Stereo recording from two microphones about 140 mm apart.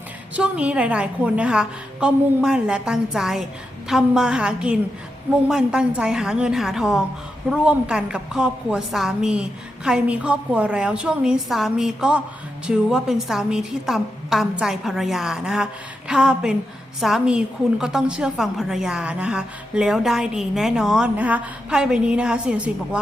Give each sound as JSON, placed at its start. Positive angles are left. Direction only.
{"t": 0.3, "sound": "a woman's voice", "side_deg": -10}